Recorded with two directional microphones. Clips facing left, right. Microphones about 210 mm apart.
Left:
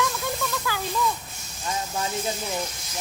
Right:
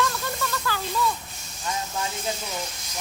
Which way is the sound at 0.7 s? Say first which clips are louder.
Even; 10° left (ahead or behind).